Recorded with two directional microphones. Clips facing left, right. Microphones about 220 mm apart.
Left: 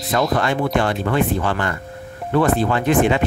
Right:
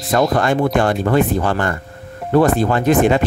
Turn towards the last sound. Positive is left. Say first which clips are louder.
# right 3 dB
turn(degrees=-45)  # may be behind; listen again after turning